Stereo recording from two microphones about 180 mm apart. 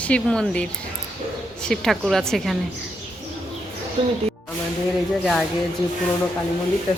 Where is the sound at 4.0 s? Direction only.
30° right (ahead or behind).